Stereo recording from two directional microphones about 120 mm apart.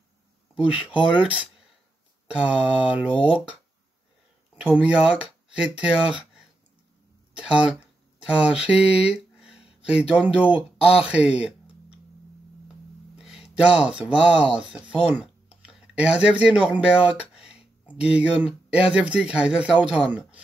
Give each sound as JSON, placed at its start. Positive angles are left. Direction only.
{"t": 0.7, "sound": "speech", "side_deg": -10}
{"t": 4.6, "sound": "speech", "side_deg": -10}
{"t": 9.4, "sound": "a sound", "side_deg": -5}
{"t": 10.5, "sound": "speech", "side_deg": 55}
{"t": 11.1, "sound": "speech", "side_deg": -10}
{"t": 13.2, "sound": "speech", "side_deg": -5}